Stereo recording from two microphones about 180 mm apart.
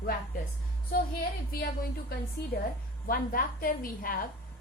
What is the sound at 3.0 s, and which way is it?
A woman's voice, 50° left (ahead or behind).